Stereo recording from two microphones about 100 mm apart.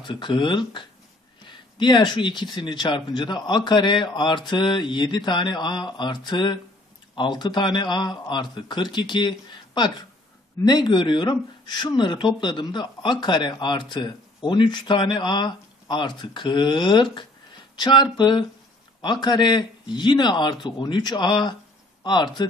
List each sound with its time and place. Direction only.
0.0 s speech: 50° left (ahead or behind)